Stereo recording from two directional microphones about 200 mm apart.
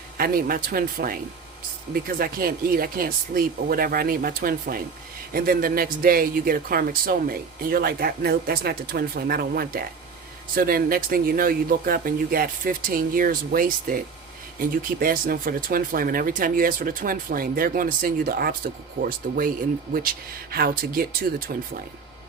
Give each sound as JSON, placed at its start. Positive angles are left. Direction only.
{"t": 0.2, "sound": "speech", "side_deg": -45}